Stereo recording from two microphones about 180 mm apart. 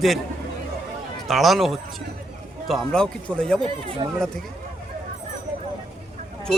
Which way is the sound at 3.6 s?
30° right (ahead or behind).